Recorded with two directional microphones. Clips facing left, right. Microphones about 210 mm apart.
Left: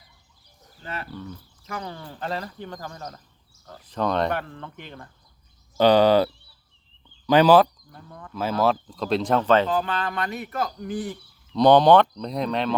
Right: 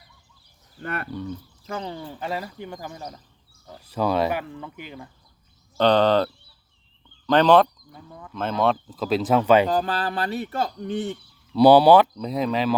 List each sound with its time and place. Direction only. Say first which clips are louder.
0.8 s speech: right 4 dB; 55° right (ahead or behind)
1.6 s speech: right 3 dB; 25° right (ahead or behind)
2.0 s speech: right 1 dB; 10° right (ahead or behind)
5.7 s speech: left 2 dB; 10° left (ahead or behind); by 9.6 s 10° right (ahead or behind)
9.6 s speech: right 2 dB; 35° right (ahead or behind)
11.5 s speech: right 2 dB; 10° right (ahead or behind)